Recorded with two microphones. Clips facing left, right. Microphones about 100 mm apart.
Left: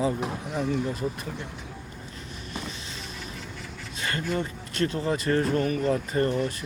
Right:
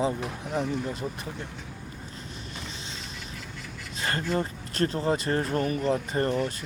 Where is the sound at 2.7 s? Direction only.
30° right (ahead or behind).